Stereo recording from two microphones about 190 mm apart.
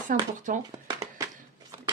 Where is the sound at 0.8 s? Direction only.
15° right (ahead or behind).